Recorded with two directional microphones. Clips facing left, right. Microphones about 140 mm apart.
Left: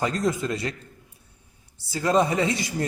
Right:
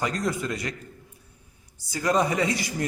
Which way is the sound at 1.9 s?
25° left (ahead or behind).